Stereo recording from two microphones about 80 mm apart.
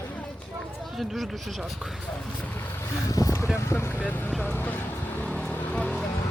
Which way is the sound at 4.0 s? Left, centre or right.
Left.